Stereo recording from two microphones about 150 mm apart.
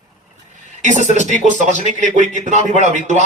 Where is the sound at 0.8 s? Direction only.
50° right (ahead or behind).